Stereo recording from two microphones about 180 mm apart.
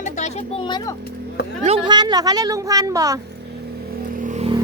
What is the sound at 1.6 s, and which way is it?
A woman's voice, 30° right (ahead or behind).